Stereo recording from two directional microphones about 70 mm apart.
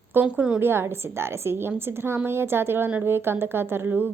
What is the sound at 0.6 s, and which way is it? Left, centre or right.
A woman's voice, right.